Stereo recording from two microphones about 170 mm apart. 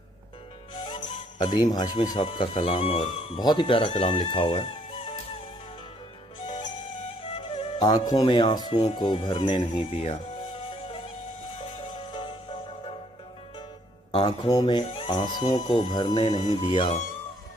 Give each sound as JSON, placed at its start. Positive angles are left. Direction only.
{"t": 0.8, "sound": "speech", "side_deg": 25}
{"t": 7.2, "sound": "speech", "side_deg": 30}
{"t": 11.5, "sound": "music", "side_deg": 30}
{"t": 14.1, "sound": "speech", "side_deg": 30}